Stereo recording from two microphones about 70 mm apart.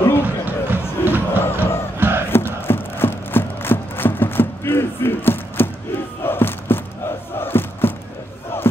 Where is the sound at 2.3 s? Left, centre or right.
Left.